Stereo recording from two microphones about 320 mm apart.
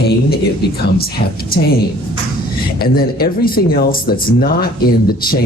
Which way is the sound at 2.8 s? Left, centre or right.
Left.